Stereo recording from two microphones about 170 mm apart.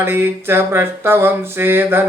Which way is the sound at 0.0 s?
15° right (ahead or behind).